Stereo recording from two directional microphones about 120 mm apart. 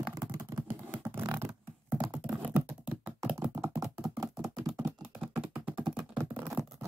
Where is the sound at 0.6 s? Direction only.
15° right (ahead or behind).